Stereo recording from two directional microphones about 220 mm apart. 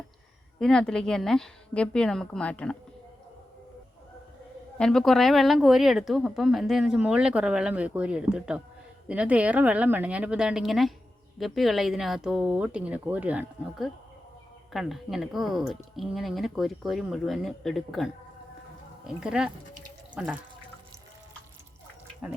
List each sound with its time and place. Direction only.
0.6 s speech: 5° left (ahead or behind)
4.8 s speech: centre (ahead or behind)